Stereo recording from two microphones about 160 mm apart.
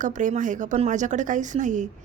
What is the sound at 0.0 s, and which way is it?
A woman's voice, 55° right (ahead or behind).